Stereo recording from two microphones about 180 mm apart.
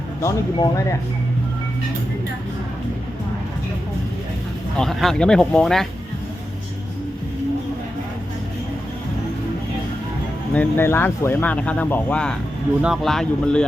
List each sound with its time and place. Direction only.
0.2 s speech: 15° left (ahead or behind)
4.8 s speech: centre (ahead or behind)
10.5 s speech: 10° left (ahead or behind)